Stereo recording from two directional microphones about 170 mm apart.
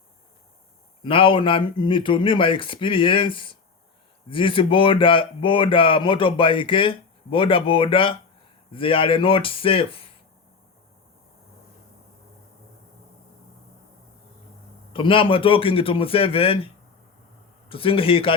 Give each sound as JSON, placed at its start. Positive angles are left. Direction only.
{"t": 1.0, "sound": "speech", "side_deg": 30}
{"t": 14.9, "sound": "speech", "side_deg": 30}